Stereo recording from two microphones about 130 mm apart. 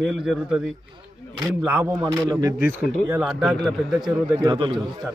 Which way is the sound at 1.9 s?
20° right (ahead or behind).